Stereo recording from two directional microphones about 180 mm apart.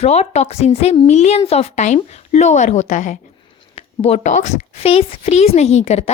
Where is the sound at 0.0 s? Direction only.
35° left (ahead or behind).